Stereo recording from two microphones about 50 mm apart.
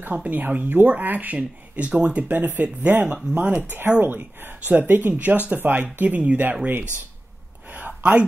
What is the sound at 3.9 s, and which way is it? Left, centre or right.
Speech, right.